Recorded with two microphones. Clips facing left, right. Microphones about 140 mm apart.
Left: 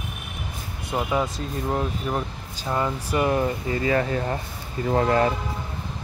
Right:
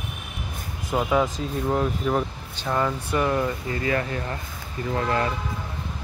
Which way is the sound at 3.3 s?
25° left (ahead or behind).